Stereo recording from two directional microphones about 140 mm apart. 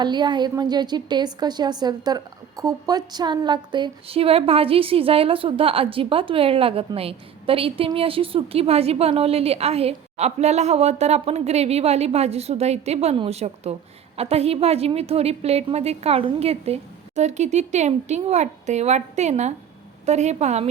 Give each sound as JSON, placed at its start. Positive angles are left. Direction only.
{"t": 0.0, "sound": "a woman's voice", "side_deg": -30}